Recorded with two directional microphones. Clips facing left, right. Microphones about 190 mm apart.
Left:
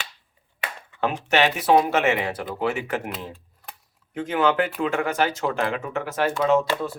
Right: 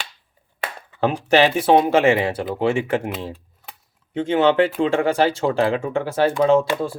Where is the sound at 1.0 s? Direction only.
35° right (ahead or behind).